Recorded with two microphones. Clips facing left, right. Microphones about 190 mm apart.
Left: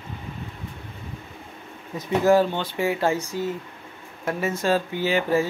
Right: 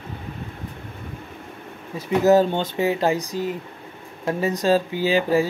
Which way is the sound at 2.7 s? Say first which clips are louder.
Right 1 dB; 20° right (ahead or behind).